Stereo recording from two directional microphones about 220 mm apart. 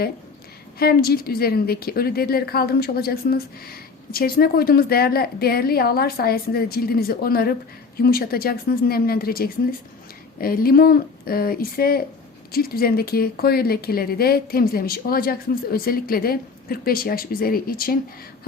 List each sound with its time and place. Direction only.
0.8 s speech: 45° left (ahead or behind)